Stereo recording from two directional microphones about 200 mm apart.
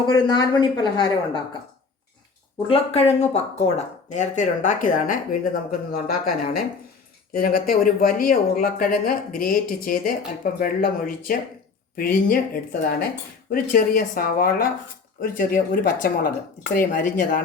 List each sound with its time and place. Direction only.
0.0 s speech: 20° left (ahead or behind)
2.6 s speech: 25° left (ahead or behind); by 17.4 s 45° left (ahead or behind)